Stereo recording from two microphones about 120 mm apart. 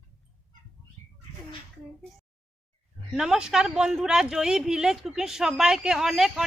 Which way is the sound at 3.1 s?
5° right (ahead or behind).